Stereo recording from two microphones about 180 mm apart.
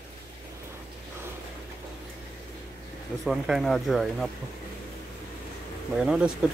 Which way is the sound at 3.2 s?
Centre (ahead or behind).